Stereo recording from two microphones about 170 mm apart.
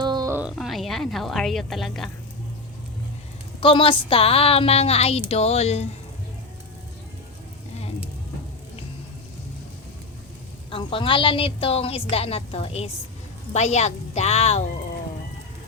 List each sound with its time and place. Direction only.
0.0 s a sound: 25° right (ahead or behind)
0.3 s a woman's voice: 5° right (ahead or behind)
3.6 s a woman's voice: 30° left (ahead or behind)
10.7 s a woman's voice: 30° left (ahead or behind)